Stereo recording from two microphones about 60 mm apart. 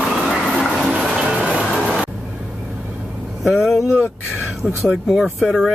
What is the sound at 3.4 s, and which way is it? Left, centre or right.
Speech, centre.